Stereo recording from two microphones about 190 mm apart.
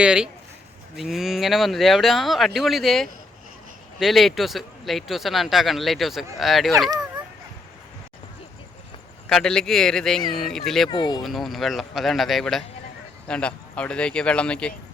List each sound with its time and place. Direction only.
0.0 s speech: 5° right (ahead or behind)
9.3 s speech: 5° left (ahead or behind)
10.8 s speech: 25° left (ahead or behind)
11.2 s speech: centre (ahead or behind)